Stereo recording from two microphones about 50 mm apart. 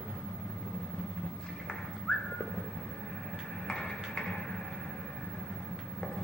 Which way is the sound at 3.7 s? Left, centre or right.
Centre.